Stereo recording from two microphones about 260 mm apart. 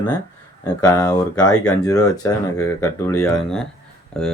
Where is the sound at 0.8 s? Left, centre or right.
Centre.